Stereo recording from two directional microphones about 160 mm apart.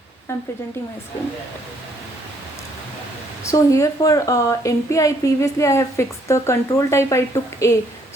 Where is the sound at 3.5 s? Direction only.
20° left (ahead or behind).